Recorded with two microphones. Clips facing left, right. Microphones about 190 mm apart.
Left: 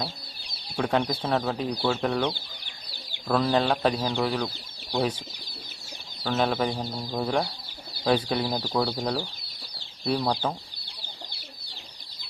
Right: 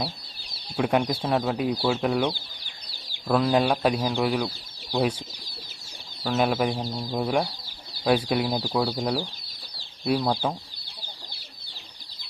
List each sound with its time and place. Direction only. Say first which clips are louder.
0.8 s speech: right 2 dB; 10° right (ahead or behind)
6.2 s speech: right 2 dB; 5° right (ahead or behind)